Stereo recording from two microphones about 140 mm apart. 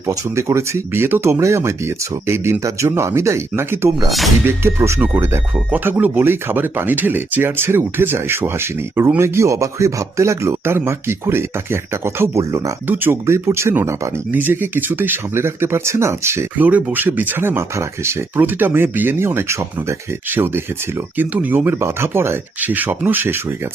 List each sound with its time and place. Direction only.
0.1 s speech: 20° right (ahead or behind)